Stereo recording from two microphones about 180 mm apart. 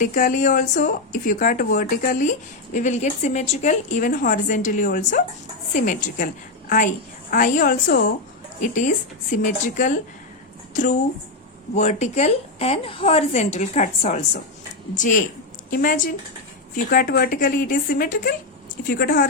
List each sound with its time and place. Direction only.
0.0 s a woman's voice: 50° left (ahead or behind)
9.3 s a woman's voice: 45° left (ahead or behind)
11.7 s a woman's voice: 40° left (ahead or behind); by 19.3 s 55° left (ahead or behind)